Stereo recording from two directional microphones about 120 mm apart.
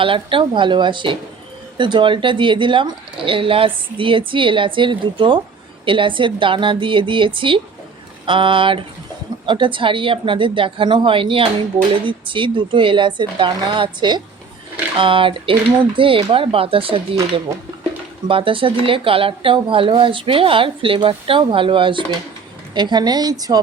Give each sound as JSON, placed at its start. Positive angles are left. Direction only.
{"t": 0.0, "sound": "speech", "side_deg": -45}
{"t": 18.3, "sound": "a woman's voice", "side_deg": -45}